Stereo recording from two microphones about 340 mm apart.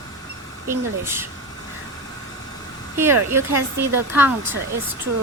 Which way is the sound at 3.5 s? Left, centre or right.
Right.